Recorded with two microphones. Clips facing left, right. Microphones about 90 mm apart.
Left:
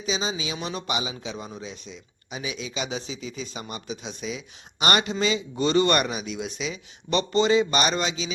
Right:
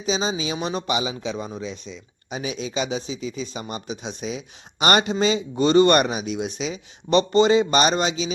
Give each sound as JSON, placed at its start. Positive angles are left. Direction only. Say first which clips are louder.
{"t": 0.0, "sound": "speech", "louder": "right 4 dB", "side_deg": -30}
{"t": 2.3, "sound": "speech", "louder": "right 5 dB", "side_deg": -40}
{"t": 2.9, "sound": "speech", "louder": "right 5 dB", "side_deg": -25}